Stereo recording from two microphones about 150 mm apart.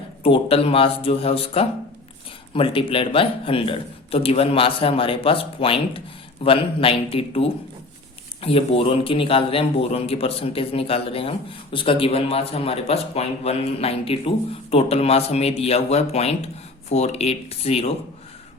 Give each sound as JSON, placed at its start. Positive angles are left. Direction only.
{"t": 0.2, "sound": "speech", "side_deg": 35}